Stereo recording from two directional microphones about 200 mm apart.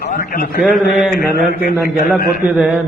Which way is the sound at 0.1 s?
45° left (ahead or behind).